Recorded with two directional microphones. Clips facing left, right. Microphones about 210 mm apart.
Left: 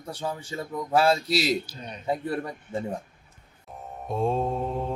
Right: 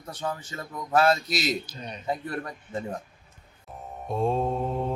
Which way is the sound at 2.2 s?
10° left (ahead or behind).